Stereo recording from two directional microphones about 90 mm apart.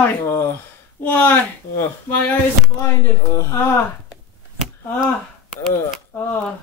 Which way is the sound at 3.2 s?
35° left (ahead or behind).